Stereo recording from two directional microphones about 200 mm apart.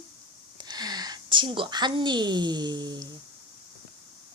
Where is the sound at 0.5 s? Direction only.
20° right (ahead or behind).